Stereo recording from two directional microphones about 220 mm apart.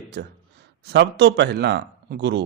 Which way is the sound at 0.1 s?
50° right (ahead or behind).